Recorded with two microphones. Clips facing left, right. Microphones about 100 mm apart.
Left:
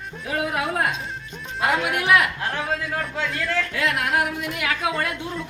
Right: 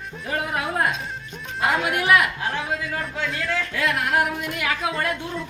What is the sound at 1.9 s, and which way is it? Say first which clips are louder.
A man's voice: right 1 dB; centre (ahead or behind).